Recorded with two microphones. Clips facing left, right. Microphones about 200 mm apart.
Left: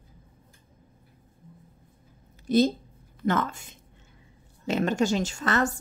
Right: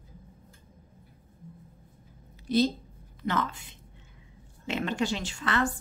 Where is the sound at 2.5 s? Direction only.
45° left (ahead or behind).